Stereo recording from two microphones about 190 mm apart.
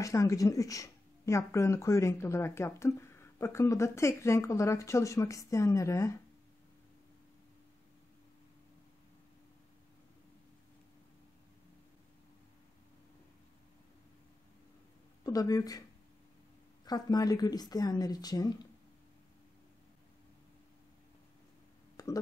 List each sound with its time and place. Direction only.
0.0 s speech: 15° left (ahead or behind)
15.2 s speech: 20° left (ahead or behind)
16.8 s speech: 20° left (ahead or behind)
21.9 s a sound: 20° left (ahead or behind)